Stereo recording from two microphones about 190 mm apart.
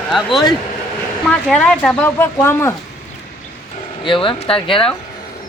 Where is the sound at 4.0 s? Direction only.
25° left (ahead or behind).